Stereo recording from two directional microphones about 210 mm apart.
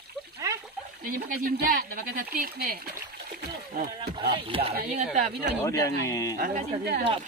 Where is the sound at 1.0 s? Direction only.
40° right (ahead or behind).